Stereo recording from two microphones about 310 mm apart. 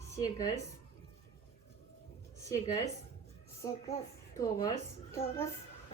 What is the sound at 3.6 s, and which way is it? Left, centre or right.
A child's voice, centre.